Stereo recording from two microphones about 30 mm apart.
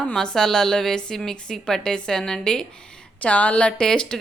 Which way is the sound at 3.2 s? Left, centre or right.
Left.